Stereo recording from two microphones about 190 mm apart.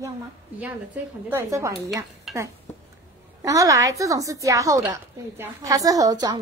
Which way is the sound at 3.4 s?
15° right (ahead or behind).